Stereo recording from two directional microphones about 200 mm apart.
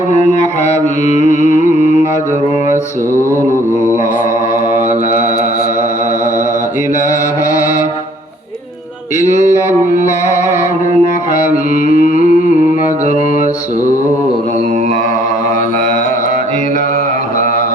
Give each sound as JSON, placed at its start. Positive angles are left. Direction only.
{"t": 0.1, "sound": "mantra", "side_deg": 35}
{"t": 3.2, "sound": "mantra", "side_deg": 15}
{"t": 11.9, "sound": "a sound", "side_deg": 40}